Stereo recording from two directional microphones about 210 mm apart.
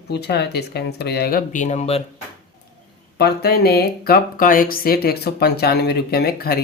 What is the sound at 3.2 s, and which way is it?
Speech, 50° left (ahead or behind).